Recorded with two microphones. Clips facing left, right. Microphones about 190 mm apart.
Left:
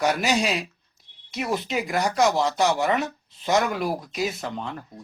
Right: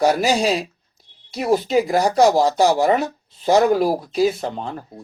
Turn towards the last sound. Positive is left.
turn(degrees=-35)  # may be behind; listen again after turning